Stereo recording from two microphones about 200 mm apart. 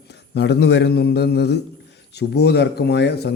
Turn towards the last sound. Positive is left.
turn(degrees=55)  # may be behind; listen again after turning